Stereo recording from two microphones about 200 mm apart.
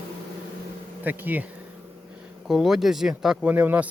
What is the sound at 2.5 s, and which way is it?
Speech, centre (ahead or behind).